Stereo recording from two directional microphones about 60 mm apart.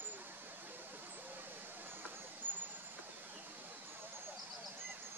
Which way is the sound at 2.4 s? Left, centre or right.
Right.